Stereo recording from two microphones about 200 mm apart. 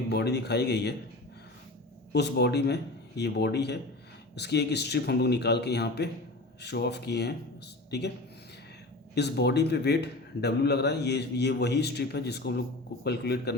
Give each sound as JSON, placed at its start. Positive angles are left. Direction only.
{"t": 0.1, "sound": "a man's voice", "side_deg": 55}
{"t": 2.1, "sound": "a man's voice", "side_deg": 55}
{"t": 9.1, "sound": "a man's voice", "side_deg": 55}